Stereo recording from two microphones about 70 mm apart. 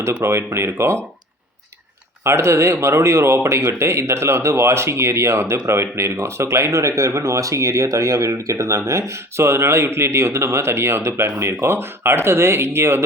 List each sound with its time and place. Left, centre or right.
0.2 s speech: right
2.2 s speech: right